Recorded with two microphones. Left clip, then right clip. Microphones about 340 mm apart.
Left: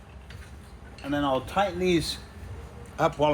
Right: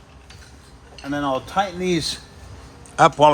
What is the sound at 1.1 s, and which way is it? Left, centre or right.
Speech, centre.